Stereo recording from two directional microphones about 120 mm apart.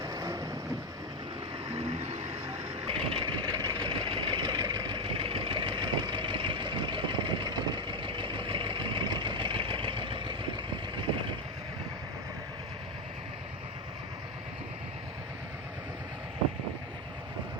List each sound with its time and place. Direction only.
0.0 s vehicle: 30° right (ahead or behind)
2.8 s vehicle: 50° right (ahead or behind)